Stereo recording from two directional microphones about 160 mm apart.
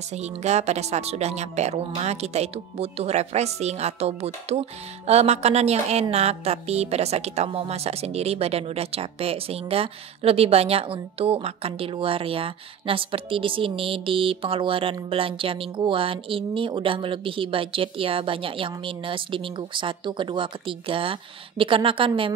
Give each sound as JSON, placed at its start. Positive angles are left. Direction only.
{"t": 0.1, "sound": "a woman's voice", "side_deg": -45}